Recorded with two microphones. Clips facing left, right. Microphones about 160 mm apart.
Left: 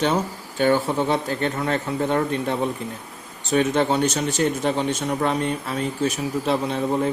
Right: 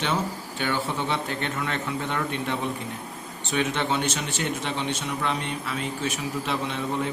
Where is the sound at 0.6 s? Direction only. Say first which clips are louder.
Left 8 dB; 40° left (ahead or behind).